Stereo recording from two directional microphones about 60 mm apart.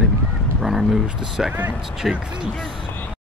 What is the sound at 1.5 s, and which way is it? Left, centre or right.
Speech, right.